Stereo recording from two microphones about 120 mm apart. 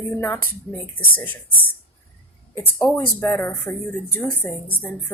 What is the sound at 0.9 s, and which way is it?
Speech, 15° left (ahead or behind).